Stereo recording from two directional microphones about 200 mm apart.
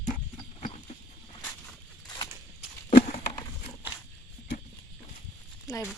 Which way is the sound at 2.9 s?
35° left (ahead or behind).